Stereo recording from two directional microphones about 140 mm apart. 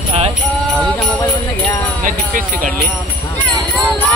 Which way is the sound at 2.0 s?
75° right (ahead or behind).